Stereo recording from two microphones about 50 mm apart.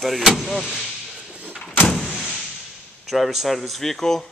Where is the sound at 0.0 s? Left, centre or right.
Centre.